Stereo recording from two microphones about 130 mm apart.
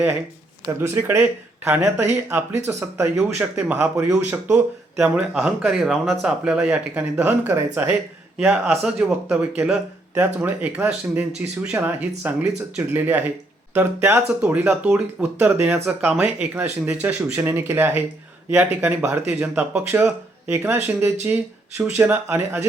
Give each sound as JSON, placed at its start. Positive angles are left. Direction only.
{"t": 0.8, "sound": "speech", "side_deg": -20}